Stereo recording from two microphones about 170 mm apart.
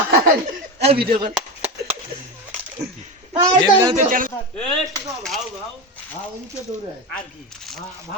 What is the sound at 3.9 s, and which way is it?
Speech, 50° right (ahead or behind).